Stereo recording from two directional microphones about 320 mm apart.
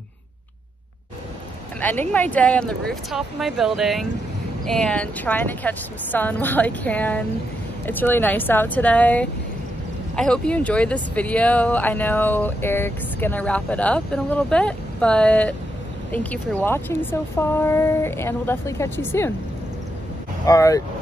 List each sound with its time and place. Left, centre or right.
1.8 s speech: centre
20.4 s speech: centre